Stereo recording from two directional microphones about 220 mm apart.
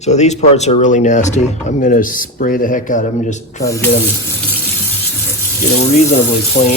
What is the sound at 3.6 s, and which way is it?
Speech, 15° left (ahead or behind).